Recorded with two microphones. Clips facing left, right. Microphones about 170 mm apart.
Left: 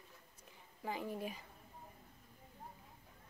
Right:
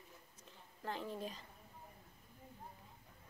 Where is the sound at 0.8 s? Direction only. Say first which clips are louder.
Left 2 dB; 10° left (ahead or behind).